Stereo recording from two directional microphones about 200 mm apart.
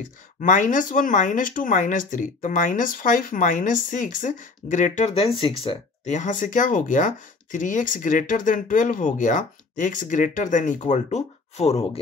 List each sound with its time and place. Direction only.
0.4 s speech: 40° left (ahead or behind)